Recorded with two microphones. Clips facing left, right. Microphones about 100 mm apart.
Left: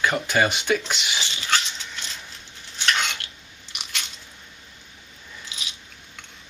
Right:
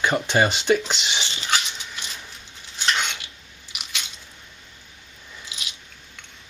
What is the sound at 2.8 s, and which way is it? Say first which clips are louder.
Stir: even; centre (ahead or behind).